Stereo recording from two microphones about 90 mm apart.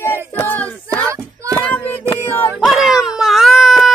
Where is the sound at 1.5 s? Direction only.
20° left (ahead or behind).